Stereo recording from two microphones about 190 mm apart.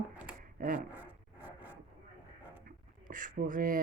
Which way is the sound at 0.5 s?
45° right (ahead or behind).